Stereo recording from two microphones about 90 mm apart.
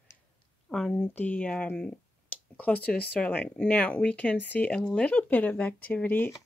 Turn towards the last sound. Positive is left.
turn(degrees=20)  # may be behind; listen again after turning